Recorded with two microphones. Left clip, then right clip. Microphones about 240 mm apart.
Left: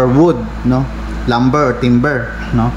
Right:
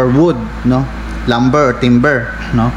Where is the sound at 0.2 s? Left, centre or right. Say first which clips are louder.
Left 1 dB; centre.